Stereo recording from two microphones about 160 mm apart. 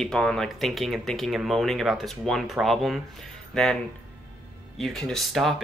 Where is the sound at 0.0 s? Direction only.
5° left (ahead or behind).